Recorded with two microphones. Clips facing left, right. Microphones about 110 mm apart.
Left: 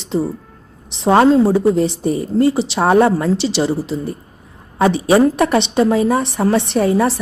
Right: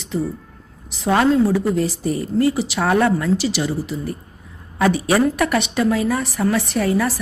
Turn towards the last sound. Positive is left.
turn(degrees=25)  # may be behind; listen again after turning